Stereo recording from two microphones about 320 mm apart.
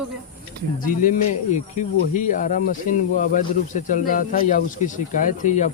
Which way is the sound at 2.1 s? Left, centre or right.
Left.